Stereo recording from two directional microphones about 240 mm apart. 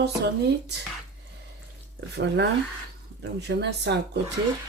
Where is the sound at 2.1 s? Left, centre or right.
Right.